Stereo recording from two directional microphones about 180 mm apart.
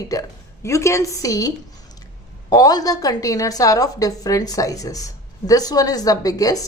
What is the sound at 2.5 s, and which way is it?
A woman's voice, 20° left (ahead or behind).